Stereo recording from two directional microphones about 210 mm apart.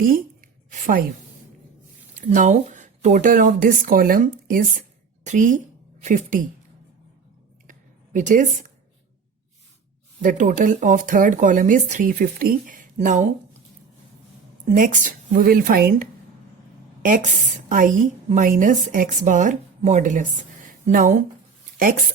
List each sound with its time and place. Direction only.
0.0 s speech: 40° right (ahead or behind)
2.3 s a woman's voice: 35° right (ahead or behind)
7.7 s a sound: 40° right (ahead or behind)
10.2 s speech: 35° right (ahead or behind)
14.7 s speech: 40° right (ahead or behind)
17.7 s speech: 40° right (ahead or behind)